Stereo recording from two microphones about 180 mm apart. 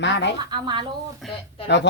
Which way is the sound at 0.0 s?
75° left (ahead or behind).